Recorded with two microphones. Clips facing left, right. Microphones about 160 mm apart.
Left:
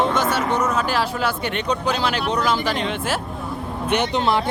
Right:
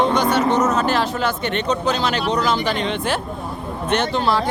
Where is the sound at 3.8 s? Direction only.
15° left (ahead or behind).